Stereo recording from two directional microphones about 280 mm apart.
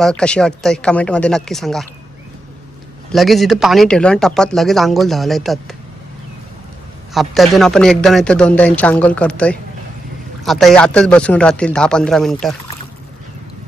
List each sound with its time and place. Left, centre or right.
0.0 s speech: centre
3.1 s speech: centre
7.2 s speech: centre